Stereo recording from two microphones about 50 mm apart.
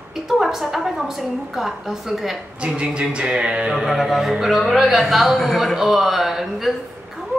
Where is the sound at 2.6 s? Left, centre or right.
Right.